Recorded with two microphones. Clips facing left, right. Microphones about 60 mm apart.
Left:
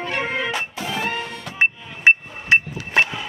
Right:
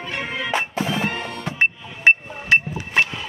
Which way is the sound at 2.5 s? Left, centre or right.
Left.